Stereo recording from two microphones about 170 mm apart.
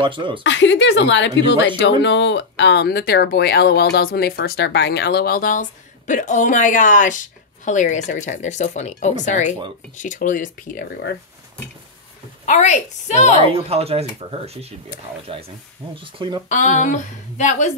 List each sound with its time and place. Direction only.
0.0 s speech: 30° right (ahead or behind)
0.4 s speech: 90° left; by 10.8 s 50° left (ahead or behind)
12.4 s speech: 45° left (ahead or behind)
13.5 s speech: 35° right (ahead or behind)
15.9 s speech: 30° right (ahead or behind)
16.4 s speech: 45° left (ahead or behind)